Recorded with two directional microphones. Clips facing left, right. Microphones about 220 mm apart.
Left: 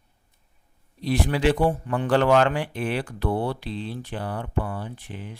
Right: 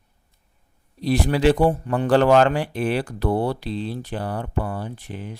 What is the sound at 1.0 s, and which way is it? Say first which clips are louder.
Speech: right 4 dB; 40° right (ahead or behind).